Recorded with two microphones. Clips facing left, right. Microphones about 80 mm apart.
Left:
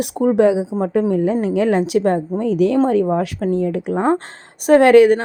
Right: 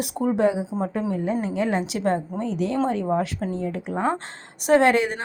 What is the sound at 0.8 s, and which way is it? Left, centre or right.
Speech, left.